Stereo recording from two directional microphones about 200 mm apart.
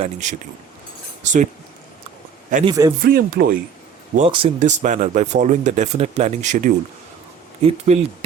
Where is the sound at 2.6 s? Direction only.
20° right (ahead or behind).